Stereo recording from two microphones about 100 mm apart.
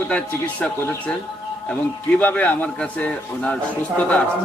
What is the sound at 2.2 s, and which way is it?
Speech, 15° left (ahead or behind).